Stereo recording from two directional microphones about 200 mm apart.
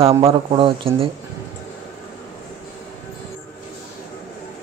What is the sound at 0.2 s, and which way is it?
Speech, 25° right (ahead or behind).